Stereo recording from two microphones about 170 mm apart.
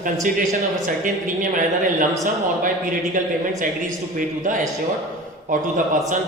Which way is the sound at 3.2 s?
50° right (ahead or behind).